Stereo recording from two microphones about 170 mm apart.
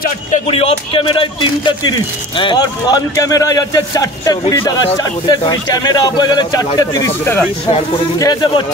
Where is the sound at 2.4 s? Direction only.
25° left (ahead or behind).